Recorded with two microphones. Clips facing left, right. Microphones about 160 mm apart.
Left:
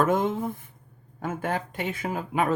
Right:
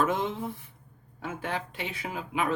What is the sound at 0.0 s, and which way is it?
Speech, 50° left (ahead or behind).